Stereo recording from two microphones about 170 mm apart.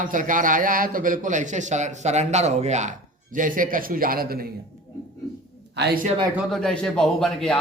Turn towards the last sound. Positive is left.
turn(degrees=5)  # may be behind; listen again after turning